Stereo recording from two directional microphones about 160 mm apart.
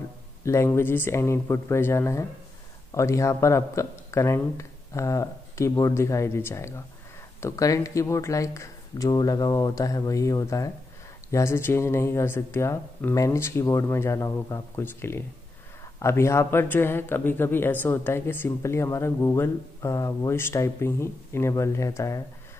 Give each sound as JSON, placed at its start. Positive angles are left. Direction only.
{"t": 0.5, "sound": "speech", "side_deg": 15}